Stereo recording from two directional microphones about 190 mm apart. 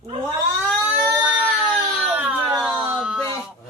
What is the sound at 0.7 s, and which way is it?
Cat, 5° right (ahead or behind).